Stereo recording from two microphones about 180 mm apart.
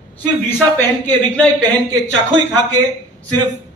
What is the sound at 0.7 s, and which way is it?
Speech, 10° left (ahead or behind).